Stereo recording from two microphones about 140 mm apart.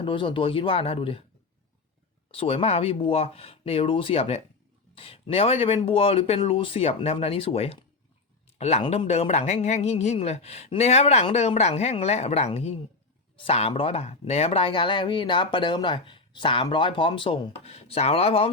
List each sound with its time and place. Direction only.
0.0 s speech: 35° left (ahead or behind)
2.3 s speech: 45° left (ahead or behind)